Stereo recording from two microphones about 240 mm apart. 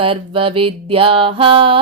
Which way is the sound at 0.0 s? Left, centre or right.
Right.